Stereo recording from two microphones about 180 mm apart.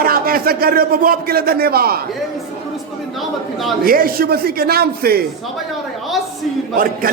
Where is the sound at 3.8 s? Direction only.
55° right (ahead or behind).